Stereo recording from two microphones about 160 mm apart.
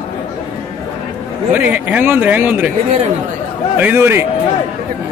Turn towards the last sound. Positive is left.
turn(degrees=-15)  # may be behind; listen again after turning